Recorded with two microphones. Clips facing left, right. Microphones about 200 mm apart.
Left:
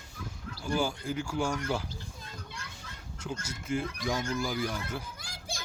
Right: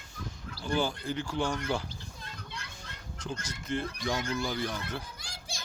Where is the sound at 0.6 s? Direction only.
10° left (ahead or behind).